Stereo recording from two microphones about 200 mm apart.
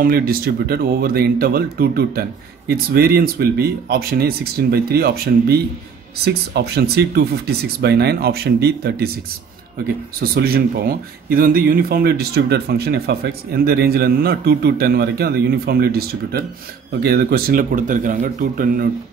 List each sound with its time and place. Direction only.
0.0 s speech: 45° right (ahead or behind)
10.2 s speech: 50° right (ahead or behind)